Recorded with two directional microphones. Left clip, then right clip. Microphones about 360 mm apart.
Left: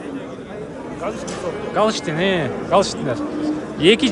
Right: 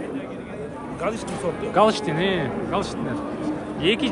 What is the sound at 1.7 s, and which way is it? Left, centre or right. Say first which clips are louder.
A man's voice: even; centre.